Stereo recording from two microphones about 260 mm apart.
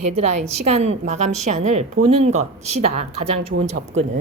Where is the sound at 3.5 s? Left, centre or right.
Right.